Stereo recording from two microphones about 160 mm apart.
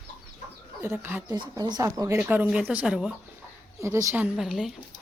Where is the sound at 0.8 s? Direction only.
10° right (ahead or behind).